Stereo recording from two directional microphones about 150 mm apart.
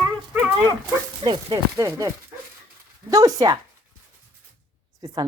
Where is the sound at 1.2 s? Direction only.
25° right (ahead or behind).